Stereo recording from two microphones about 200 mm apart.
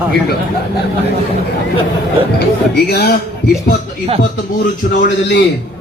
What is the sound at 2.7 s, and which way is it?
Speech, 55° left (ahead or behind).